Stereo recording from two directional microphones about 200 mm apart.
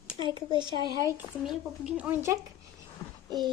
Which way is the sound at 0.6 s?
20° right (ahead or behind).